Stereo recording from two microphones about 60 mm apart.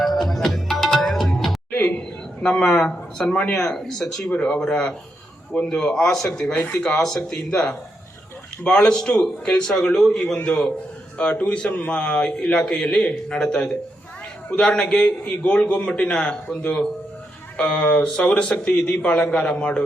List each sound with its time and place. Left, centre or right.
0.0 s music: centre
2.0 s a sound: centre
3.5 s a man's voice: centre
4.3 s a man's voice: centre
17.6 s a man's voice: centre